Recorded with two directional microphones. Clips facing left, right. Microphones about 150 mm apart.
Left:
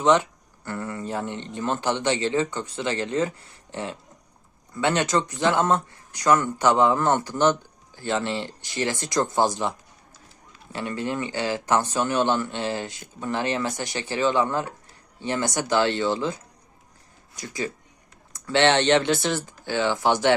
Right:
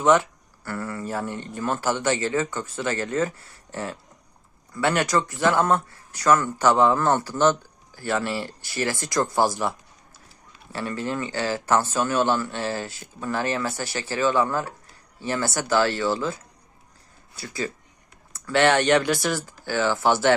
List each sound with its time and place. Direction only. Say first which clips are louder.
0.0 s speech: right 1 dB; 20° left (ahead or behind)